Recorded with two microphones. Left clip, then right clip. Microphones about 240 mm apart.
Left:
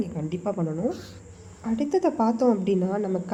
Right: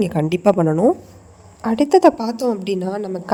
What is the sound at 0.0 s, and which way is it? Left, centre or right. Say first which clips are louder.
A woman's voice: right 13 dB; right.